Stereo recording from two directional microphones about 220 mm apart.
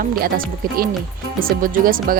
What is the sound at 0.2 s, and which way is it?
Speech, 40° right (ahead or behind).